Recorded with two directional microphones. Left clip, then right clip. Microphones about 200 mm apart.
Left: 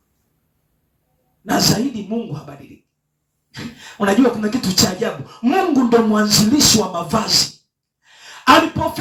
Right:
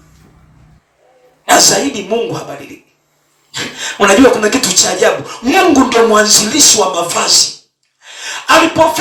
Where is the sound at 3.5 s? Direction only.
30° right (ahead or behind).